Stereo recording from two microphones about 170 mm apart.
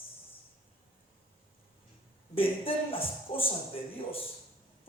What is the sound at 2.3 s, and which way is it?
Speech, 35° left (ahead or behind).